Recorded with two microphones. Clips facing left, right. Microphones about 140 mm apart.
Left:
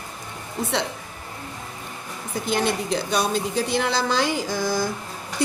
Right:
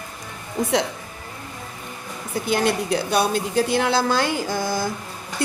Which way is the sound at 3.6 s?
50° right (ahead or behind).